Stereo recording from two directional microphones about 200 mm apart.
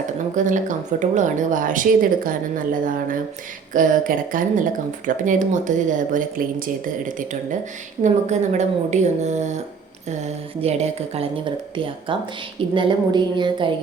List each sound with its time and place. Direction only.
0.3 s speech: 40° right (ahead or behind)
8.0 s speech: 35° right (ahead or behind)
12.7 s a woman's voice: 25° right (ahead or behind)